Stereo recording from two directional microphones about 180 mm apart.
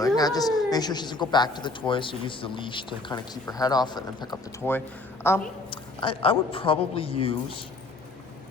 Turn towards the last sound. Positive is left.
turn(degrees=30)  # may be behind; listen again after turning